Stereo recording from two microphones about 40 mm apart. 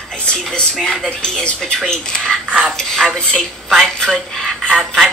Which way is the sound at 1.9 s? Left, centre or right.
Centre.